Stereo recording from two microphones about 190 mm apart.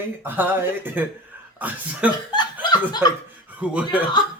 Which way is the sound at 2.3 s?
25° left (ahead or behind).